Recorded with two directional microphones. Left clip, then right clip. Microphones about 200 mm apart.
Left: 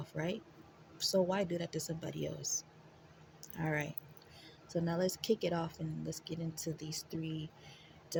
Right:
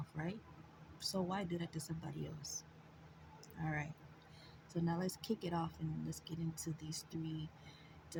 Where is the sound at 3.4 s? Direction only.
40° left (ahead or behind).